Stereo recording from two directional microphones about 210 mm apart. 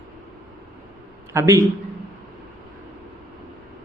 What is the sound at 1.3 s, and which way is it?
Speech, 15° right (ahead or behind).